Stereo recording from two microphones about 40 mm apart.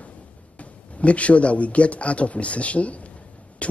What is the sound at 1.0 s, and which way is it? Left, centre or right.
Speech, left.